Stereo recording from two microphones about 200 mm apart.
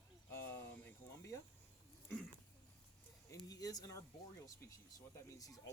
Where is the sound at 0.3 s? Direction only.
10° left (ahead or behind).